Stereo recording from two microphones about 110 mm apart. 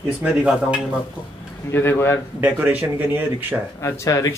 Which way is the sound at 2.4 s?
15° right (ahead or behind).